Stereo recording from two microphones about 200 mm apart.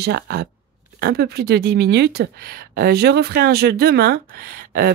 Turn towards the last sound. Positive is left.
turn(degrees=-45)  # may be behind; listen again after turning